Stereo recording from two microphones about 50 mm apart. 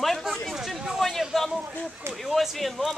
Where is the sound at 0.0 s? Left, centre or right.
Centre.